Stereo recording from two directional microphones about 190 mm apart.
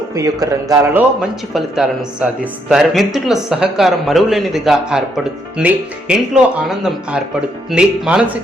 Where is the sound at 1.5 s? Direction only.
Centre (ahead or behind).